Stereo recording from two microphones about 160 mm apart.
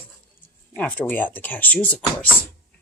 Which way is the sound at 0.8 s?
10° left (ahead or behind).